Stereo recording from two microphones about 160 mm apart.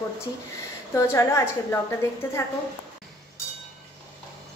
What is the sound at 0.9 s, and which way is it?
A woman's voice, 15° left (ahead or behind).